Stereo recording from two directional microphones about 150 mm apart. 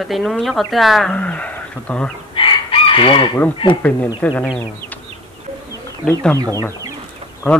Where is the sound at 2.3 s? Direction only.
35° left (ahead or behind).